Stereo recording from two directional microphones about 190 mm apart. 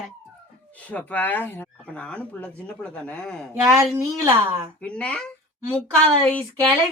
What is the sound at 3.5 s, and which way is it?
A woman's voice, 15° right (ahead or behind).